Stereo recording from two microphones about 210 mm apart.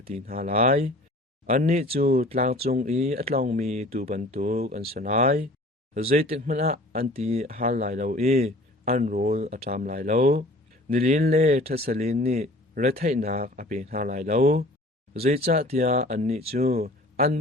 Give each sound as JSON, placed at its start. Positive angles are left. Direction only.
{"t": 0.3, "sound": "a man's voice", "side_deg": -35}
{"t": 2.0, "sound": "speech", "side_deg": -45}
{"t": 2.3, "sound": "a man's voice", "side_deg": -30}
{"t": 11.4, "sound": "a man's voice", "side_deg": -30}
{"t": 11.7, "sound": "speech", "side_deg": -45}
{"t": 11.9, "sound": "a man's voice", "side_deg": -30}
{"t": 16.8, "sound": "a sound", "side_deg": -45}